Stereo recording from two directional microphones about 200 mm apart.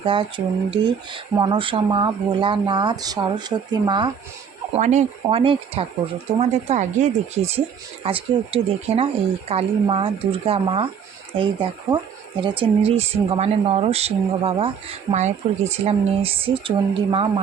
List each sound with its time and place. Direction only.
0.0 s speech: 25° right (ahead or behind)
4.7 s speech: 35° right (ahead or behind)
15.7 s speech: 30° right (ahead or behind)